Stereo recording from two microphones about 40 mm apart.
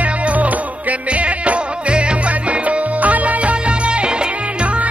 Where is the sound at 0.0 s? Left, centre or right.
Right.